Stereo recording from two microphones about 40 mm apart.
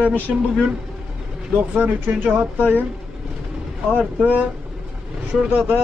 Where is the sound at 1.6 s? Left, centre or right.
Right.